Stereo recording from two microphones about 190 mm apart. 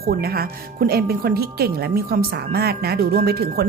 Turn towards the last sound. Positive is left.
turn(degrees=-55)  # may be behind; listen again after turning